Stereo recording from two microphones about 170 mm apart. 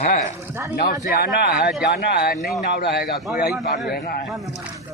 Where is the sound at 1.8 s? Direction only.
70° left (ahead or behind).